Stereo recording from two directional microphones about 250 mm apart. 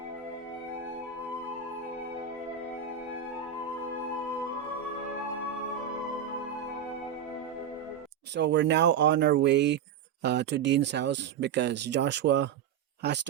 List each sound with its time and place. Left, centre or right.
8.4 s speech: right